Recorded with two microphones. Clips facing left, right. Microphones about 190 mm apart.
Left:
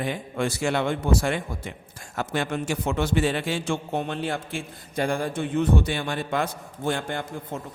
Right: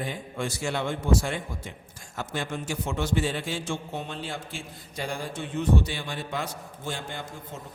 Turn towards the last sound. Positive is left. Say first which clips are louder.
# left 7 dB
turn(degrees=55)  # may be behind; listen again after turning